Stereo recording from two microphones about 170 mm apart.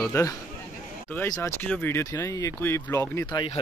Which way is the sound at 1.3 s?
20° left (ahead or behind).